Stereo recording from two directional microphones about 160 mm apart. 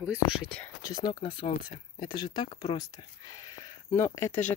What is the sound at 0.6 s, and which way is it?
Speech, 20° left (ahead or behind).